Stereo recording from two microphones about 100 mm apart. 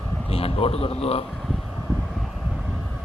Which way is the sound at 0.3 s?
80° left.